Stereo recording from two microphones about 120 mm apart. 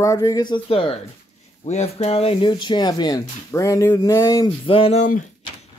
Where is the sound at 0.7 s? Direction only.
50° left (ahead or behind).